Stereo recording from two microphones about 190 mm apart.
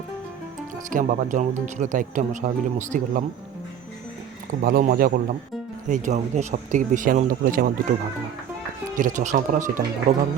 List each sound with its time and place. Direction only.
0.9 s speech: 45° right (ahead or behind)
4.6 s a man's voice: 50° right (ahead or behind)
5.9 s speech: 40° right (ahead or behind)
9.0 s speech: 40° right (ahead or behind)